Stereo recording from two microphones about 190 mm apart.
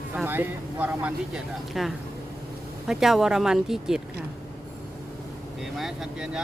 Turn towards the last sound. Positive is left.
turn(degrees=-5)  # may be behind; listen again after turning